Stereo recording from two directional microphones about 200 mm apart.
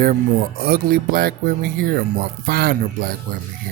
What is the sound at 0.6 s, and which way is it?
Speech, 45° right (ahead or behind).